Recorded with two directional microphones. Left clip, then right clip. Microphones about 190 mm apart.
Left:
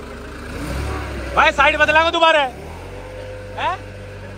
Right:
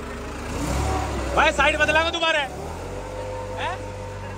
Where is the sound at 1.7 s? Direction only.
5° right (ahead or behind).